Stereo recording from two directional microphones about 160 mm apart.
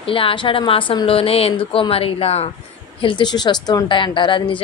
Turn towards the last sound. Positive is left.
turn(degrees=30)  # may be behind; listen again after turning